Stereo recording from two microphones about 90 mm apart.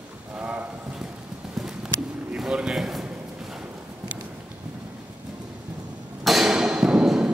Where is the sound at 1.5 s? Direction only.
5° right (ahead or behind).